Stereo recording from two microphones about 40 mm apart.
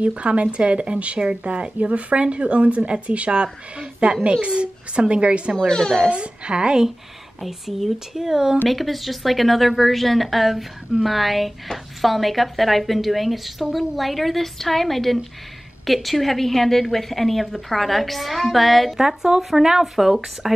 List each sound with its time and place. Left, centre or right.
0.0 s a woman's voice: right
5.7 s a child's voice: centre
6.0 s a woman's voice: right
7.4 s speech: centre
8.6 s a woman's voice: centre
18.9 s speech: centre